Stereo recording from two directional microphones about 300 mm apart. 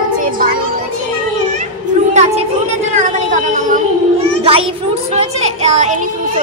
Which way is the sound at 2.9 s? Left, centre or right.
Right.